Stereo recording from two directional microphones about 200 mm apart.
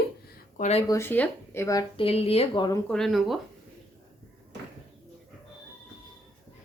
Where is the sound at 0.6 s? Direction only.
30° left (ahead or behind).